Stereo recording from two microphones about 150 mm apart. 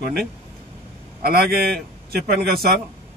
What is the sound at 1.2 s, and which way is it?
Speech, 90° right.